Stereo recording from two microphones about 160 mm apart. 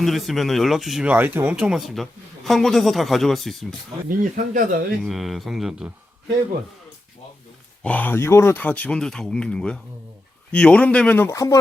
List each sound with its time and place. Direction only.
0.0 s speech: centre (ahead or behind)
4.2 s speech: 60° right (ahead or behind)
5.0 s speech: centre (ahead or behind)
7.9 s speech: 10° left (ahead or behind)